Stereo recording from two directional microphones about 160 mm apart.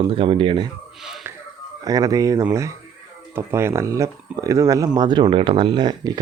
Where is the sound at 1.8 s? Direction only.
20° right (ahead or behind).